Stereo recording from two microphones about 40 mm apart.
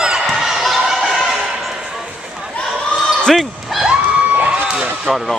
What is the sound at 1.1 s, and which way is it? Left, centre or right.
Basketball bounce, centre.